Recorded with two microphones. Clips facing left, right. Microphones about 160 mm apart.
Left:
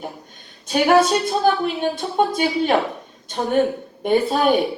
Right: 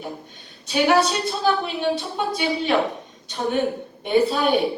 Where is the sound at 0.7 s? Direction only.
50° left (ahead or behind).